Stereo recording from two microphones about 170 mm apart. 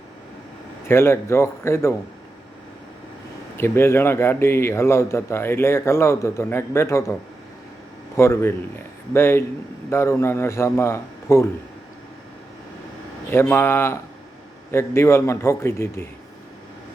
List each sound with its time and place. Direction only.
0.9 s a man's voice: 15° left (ahead or behind)
3.6 s a man's voice: 15° left (ahead or behind)
13.3 s a man's voice: 15° left (ahead or behind)